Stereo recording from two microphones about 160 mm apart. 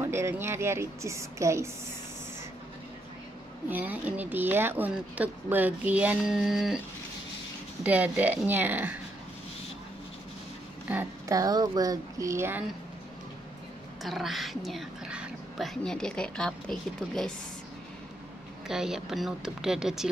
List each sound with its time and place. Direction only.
0.0 s speech: 15° right (ahead or behind)
3.6 s speech: 10° right (ahead or behind)
7.8 s speech: 10° right (ahead or behind)
10.9 s speech: 15° right (ahead or behind)
14.0 s speech: centre (ahead or behind)
18.7 s speech: 5° right (ahead or behind)